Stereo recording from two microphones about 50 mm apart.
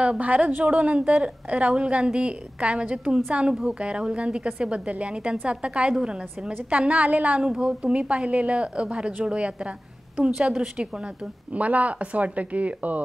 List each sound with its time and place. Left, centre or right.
0.0 s a woman's voice: right
11.5 s a woman's voice: right